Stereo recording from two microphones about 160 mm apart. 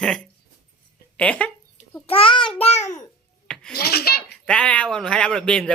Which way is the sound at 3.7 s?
75° left (ahead or behind).